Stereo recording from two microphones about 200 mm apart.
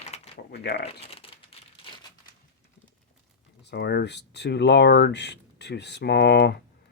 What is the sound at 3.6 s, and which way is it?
Speech, 55° left (ahead or behind).